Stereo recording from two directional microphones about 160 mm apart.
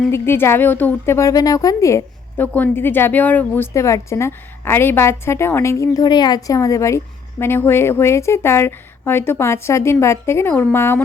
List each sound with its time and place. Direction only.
0.1 s a woman's voice: 15° left (ahead or behind)